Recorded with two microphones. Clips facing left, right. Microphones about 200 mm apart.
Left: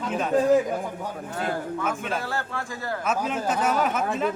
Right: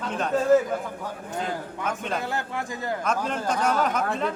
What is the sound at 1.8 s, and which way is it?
Speech, 5° left (ahead or behind).